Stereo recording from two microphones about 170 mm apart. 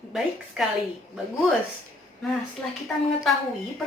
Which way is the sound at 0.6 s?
5° right (ahead or behind).